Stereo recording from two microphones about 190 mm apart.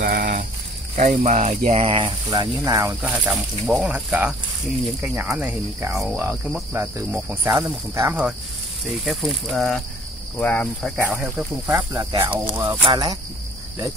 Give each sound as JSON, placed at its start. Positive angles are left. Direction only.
{"t": 0.0, "sound": "a sound", "side_deg": -50}
{"t": 0.9, "sound": "speech", "side_deg": -40}
{"t": 3.0, "sound": "speech", "side_deg": -5}
{"t": 5.0, "sound": "cricket", "side_deg": -10}
{"t": 8.8, "sound": "speech", "side_deg": 0}
{"t": 10.4, "sound": "cricket", "side_deg": 10}
{"t": 11.1, "sound": "cricket", "side_deg": -10}
{"t": 12.8, "sound": "speech", "side_deg": -20}